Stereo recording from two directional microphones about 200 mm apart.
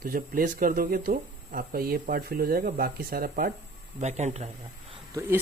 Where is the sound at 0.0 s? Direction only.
45° right (ahead or behind).